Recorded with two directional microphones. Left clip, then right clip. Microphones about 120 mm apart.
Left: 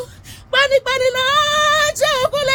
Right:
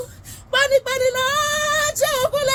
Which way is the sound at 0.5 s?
25° left (ahead or behind).